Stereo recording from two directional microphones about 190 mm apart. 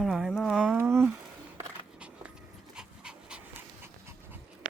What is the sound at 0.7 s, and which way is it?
Speech, 10° right (ahead or behind).